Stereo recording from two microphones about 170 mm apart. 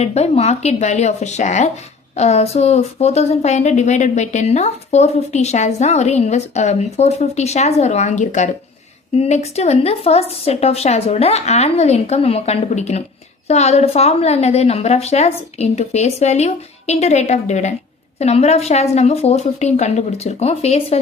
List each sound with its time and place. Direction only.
0.0 s speech: 40° left (ahead or behind)